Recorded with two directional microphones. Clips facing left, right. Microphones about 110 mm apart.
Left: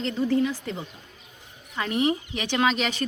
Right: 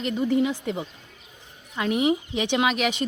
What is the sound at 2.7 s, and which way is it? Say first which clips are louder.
Speech: right 1 dB; 5° right (ahead or behind).